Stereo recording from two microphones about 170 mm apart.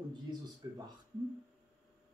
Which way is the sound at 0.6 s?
20° right (ahead or behind).